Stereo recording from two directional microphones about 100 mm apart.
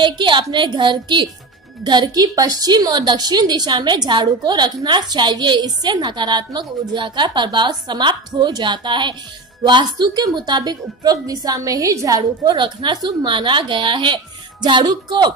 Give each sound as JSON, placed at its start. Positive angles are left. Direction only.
{"t": 0.0, "sound": "a woman's voice", "side_deg": -55}
{"t": 12.2, "sound": "a woman's voice", "side_deg": -50}